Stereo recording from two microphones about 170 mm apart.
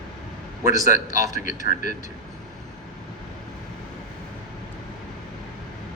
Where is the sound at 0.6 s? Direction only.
50° left (ahead or behind).